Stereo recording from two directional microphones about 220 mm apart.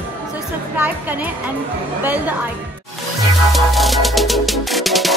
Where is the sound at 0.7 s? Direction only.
5° right (ahead or behind).